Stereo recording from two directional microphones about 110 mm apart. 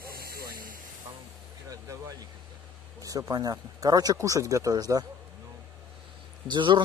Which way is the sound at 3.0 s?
30° right (ahead or behind).